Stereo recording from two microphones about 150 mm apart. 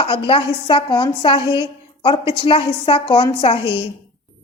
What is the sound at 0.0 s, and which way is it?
Speech, 35° left (ahead or behind).